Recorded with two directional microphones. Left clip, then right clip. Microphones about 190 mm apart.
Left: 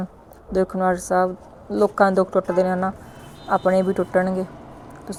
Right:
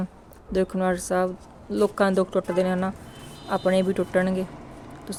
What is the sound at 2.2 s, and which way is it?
Speech, 5° right (ahead or behind).